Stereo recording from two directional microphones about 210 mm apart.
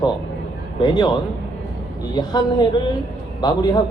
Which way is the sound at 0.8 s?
20° left (ahead or behind).